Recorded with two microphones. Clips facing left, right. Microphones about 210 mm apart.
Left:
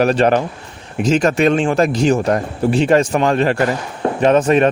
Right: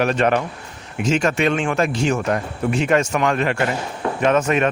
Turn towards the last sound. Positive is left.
turn(degrees=35)  # may be behind; listen again after turning